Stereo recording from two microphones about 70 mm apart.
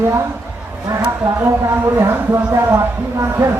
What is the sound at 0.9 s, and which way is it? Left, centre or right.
Speech, right.